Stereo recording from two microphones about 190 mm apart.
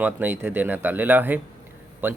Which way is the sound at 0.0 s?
10° right (ahead or behind).